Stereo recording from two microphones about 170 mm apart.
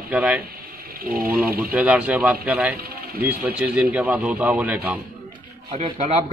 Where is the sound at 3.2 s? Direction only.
10° right (ahead or behind).